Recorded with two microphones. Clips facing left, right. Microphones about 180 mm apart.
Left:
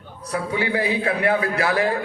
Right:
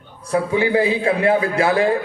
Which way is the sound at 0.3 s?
25° right (ahead or behind).